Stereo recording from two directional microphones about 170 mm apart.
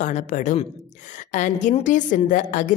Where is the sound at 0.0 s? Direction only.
45° left (ahead or behind).